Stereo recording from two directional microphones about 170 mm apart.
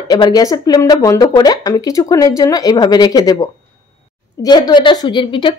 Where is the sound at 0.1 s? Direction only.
25° left (ahead or behind).